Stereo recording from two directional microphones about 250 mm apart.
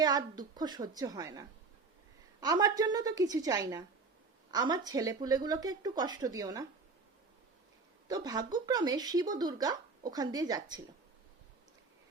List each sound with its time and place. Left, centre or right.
0.0 s speech: centre
8.0 s speech: centre